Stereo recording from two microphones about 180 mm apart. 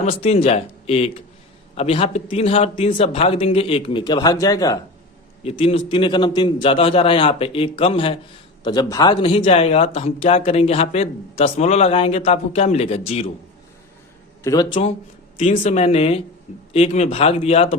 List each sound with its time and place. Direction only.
0.0 s a man's voice: 35° left (ahead or behind); by 4.8 s 20° left (ahead or behind)
5.4 s a man's voice: 30° left (ahead or behind)
14.4 s a man's voice: 20° left (ahead or behind)